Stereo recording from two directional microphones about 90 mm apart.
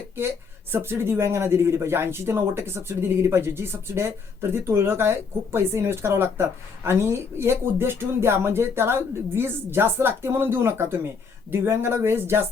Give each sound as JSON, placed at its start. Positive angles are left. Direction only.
{"t": 0.7, "sound": "speech", "side_deg": -25}